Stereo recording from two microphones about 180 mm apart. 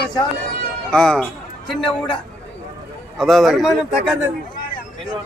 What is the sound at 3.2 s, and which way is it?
Speech, centre (ahead or behind).